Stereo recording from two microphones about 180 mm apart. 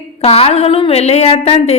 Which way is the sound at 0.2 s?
35° left (ahead or behind).